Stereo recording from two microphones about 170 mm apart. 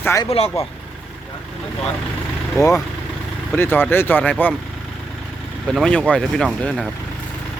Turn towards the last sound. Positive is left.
turn(degrees=0)  # may be behind; listen again after turning